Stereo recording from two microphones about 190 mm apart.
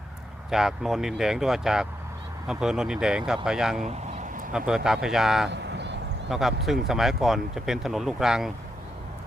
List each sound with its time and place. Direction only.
0.5 s speech: centre (ahead or behind)
3.8 s vehicle: 40° right (ahead or behind)
4.5 s speech: 5° right (ahead or behind)
5.5 s a sound: 65° right (ahead or behind)
6.3 s speech: centre (ahead or behind)